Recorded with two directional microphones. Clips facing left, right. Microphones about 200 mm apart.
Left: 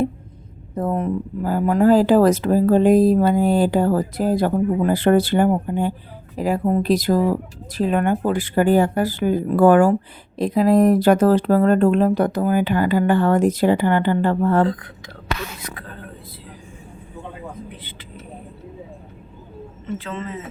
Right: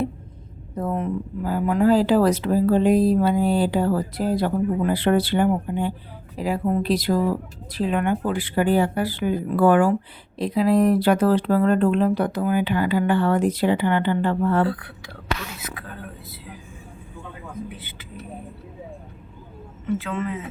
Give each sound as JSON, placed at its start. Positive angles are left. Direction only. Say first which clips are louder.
{"t": 0.8, "sound": "speech", "louder": "left 3 dB", "side_deg": 40}
{"t": 14.7, "sound": "speech", "louder": "left 2 dB", "side_deg": -10}